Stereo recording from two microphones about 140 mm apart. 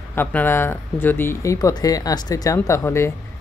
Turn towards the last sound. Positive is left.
turn(degrees=20)  # may be behind; listen again after turning